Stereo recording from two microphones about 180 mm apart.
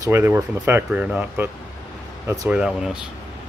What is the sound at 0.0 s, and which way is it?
Speech, 10° right (ahead or behind).